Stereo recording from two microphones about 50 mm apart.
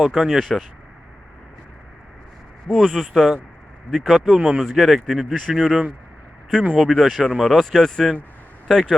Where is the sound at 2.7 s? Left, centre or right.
Centre.